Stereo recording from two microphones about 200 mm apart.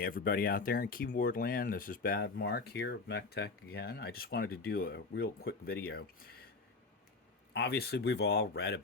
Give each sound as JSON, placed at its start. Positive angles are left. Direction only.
{"t": 0.0, "sound": "speech", "side_deg": 45}
{"t": 7.5, "sound": "speech", "side_deg": 55}